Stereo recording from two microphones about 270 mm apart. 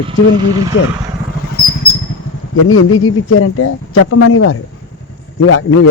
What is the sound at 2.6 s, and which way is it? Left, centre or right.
Speech, left.